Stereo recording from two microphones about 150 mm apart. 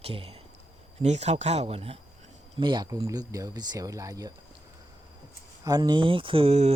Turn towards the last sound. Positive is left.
turn(degrees=-45)  # may be behind; listen again after turning